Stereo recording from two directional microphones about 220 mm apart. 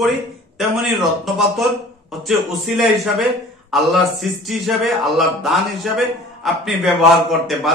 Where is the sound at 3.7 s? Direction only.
Centre (ahead or behind).